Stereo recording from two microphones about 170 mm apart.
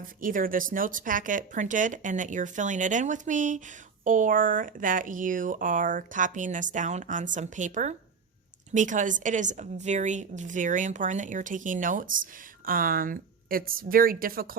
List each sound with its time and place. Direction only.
0.0 s a woman's voice: 55° right (ahead or behind)